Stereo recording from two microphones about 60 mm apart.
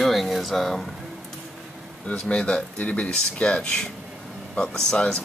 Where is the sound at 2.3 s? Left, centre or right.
Left.